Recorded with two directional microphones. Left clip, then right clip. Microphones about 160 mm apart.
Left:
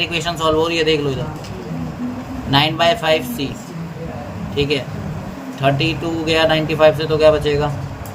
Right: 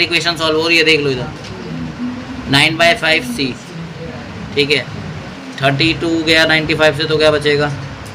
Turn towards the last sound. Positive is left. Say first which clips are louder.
# right 1 dB
turn(degrees=-15)  # may be behind; listen again after turning